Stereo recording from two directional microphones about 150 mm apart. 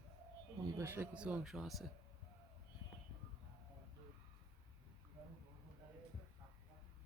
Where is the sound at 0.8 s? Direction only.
15° right (ahead or behind).